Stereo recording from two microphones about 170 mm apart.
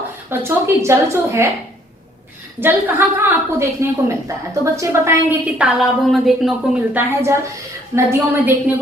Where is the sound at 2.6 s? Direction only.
10° right (ahead or behind).